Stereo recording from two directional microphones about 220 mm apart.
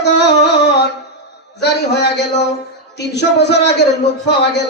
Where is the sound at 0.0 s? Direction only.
50° left (ahead or behind).